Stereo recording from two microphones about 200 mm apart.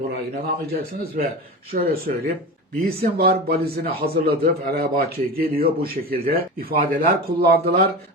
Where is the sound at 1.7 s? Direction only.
45° right (ahead or behind).